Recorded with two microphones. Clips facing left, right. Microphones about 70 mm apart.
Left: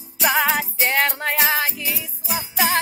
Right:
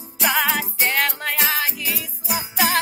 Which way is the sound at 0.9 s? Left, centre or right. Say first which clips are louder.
Left 4 dB; left.